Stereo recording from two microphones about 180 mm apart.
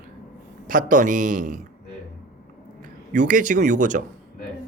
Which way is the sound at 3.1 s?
45° right (ahead or behind).